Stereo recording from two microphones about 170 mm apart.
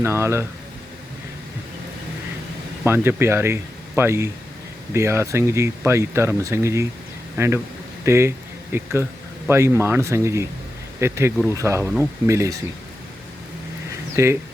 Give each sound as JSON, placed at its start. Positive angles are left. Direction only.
{"t": 0.0, "sound": "speech", "side_deg": -15}
{"t": 2.8, "sound": "speech", "side_deg": -15}
{"t": 14.2, "sound": "speech", "side_deg": -15}